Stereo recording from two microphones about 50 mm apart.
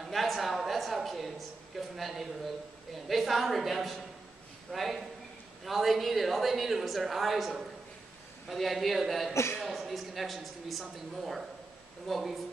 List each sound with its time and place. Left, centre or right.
0.0 s a sound: centre
1.8 s a woman's voice: centre
9.3 s a man's voice: left
9.6 s a woman's voice: centre